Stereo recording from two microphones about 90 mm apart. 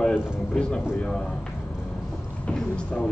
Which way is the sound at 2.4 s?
10° left (ahead or behind).